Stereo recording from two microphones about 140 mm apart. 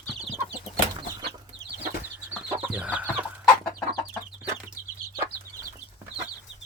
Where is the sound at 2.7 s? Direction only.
10° right (ahead or behind).